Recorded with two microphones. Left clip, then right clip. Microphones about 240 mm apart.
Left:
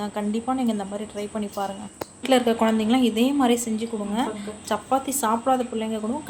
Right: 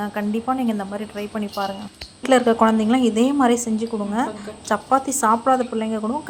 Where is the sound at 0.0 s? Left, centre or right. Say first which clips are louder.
Right 3 dB; centre.